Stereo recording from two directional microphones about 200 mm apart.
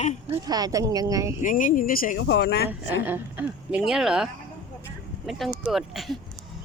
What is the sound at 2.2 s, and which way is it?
Speech, 60° left (ahead or behind).